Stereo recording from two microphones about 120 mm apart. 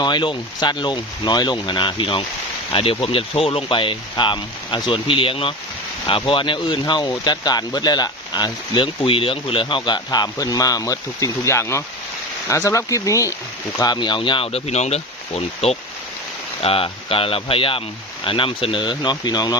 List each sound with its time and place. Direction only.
0.0 s speech: 40° left (ahead or behind)
9.0 s speech: 50° left (ahead or behind)